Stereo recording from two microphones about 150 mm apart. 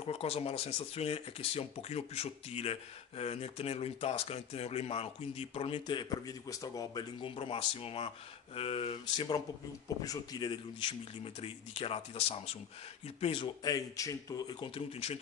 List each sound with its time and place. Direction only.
0.0 s speech: 40° left (ahead or behind)
5.9 s speech: 30° left (ahead or behind)